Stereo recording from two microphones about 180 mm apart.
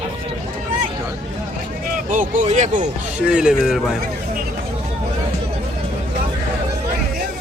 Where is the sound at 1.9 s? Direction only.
50° right (ahead or behind).